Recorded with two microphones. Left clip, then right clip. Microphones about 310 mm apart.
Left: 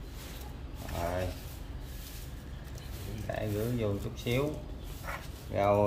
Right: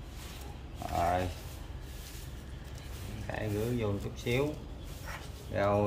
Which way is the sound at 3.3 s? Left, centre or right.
Centre.